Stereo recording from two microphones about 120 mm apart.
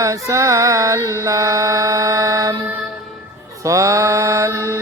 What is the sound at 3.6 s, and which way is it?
Mantra, 25° right (ahead or behind).